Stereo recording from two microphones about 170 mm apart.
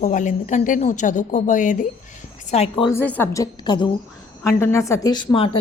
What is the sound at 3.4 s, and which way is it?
Speech, 25° left (ahead or behind).